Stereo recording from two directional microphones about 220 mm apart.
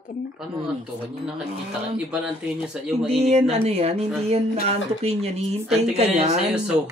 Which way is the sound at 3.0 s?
30° right (ahead or behind).